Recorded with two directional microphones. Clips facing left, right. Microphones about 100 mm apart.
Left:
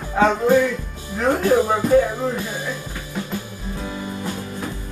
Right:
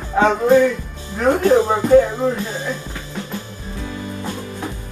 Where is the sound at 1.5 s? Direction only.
25° right (ahead or behind).